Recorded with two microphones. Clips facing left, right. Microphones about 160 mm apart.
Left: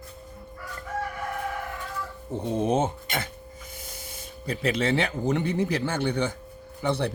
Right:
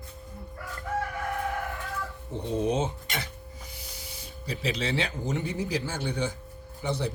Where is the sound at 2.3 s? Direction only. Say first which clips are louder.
Left 3 dB; 50° left (ahead or behind).